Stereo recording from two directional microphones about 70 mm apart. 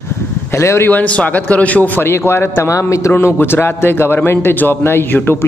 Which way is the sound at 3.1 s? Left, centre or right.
Left.